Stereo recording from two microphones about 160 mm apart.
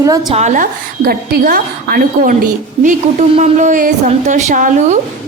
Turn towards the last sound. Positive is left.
turn(degrees=-50)  # may be behind; listen again after turning